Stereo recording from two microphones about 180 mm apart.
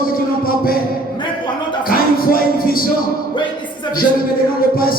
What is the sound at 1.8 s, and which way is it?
Music, 55° left (ahead or behind).